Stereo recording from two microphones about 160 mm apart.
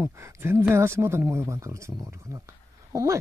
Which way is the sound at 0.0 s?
15° right (ahead or behind).